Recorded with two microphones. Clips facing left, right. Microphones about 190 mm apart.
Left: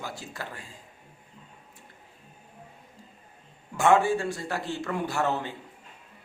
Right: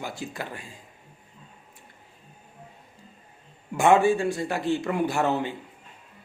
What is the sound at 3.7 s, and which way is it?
A man's voice, 15° right (ahead or behind).